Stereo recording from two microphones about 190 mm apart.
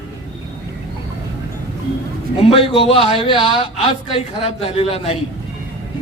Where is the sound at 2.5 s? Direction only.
30° left (ahead or behind).